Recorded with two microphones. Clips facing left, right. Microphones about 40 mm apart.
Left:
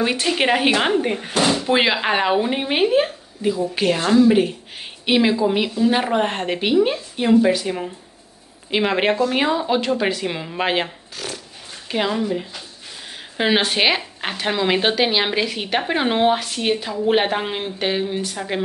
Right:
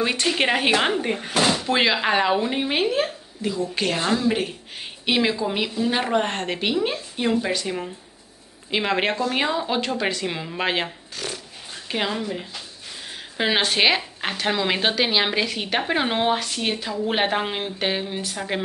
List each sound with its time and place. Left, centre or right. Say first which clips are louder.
0.0 s a woman's voice: left 2 dB; centre